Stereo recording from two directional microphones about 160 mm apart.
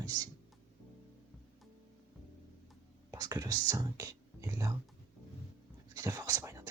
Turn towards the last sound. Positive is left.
turn(degrees=-20)  # may be behind; listen again after turning